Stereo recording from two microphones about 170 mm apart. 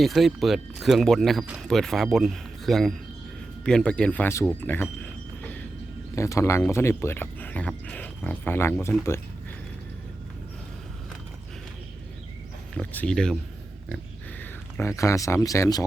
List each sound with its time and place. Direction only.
0.0 s speech: centre (ahead or behind)
6.1 s speech: 15° left (ahead or behind)
12.7 s speech: 10° left (ahead or behind)
14.8 s speech: 15° left (ahead or behind)